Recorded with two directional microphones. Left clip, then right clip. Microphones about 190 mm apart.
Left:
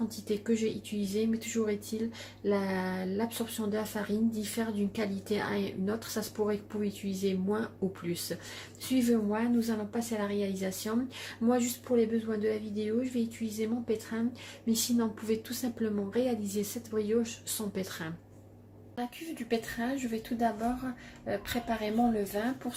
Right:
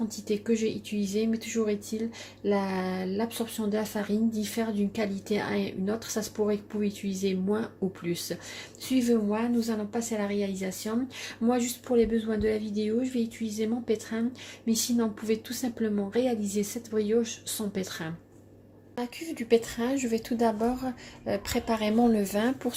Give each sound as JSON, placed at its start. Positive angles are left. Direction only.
{"t": 0.3, "sound": "a woman's voice", "side_deg": -10}